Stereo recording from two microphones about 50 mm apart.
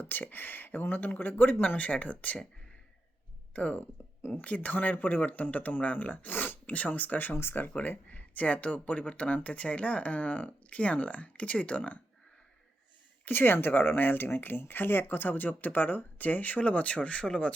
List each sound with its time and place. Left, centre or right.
0.0 s speech: left
3.5 s speech: left
7.8 s speech: left
13.2 s speech: left